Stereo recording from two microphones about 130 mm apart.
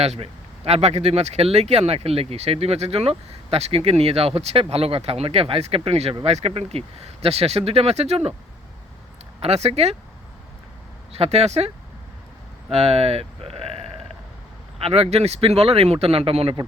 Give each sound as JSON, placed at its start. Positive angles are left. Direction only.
{"t": 0.0, "sound": "speech", "side_deg": -50}
{"t": 9.4, "sound": "speech", "side_deg": -55}
{"t": 11.1, "sound": "speech", "side_deg": -55}
{"t": 12.7, "sound": "speech", "side_deg": -50}
{"t": 14.8, "sound": "speech", "side_deg": -50}